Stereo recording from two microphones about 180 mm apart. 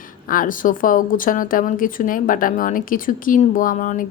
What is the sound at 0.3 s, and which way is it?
Speech, 50° left (ahead or behind).